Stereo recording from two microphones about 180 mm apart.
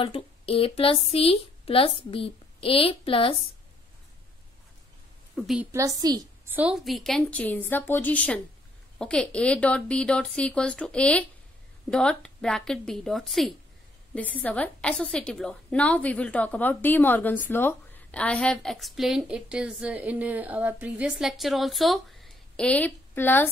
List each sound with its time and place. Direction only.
0.0 s speech: 30° left (ahead or behind)
5.3 s a woman's voice: centre (ahead or behind)
5.7 s a woman's voice: 15° right (ahead or behind)
6.5 s a woman's voice: 5° right (ahead or behind); by 23.5 s 10° left (ahead or behind)